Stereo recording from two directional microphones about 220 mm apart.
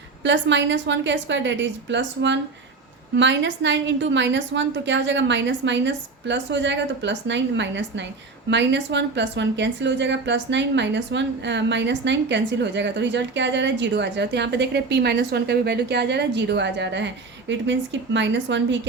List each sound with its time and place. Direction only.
0.2 s a woman's voice: 55° right (ahead or behind)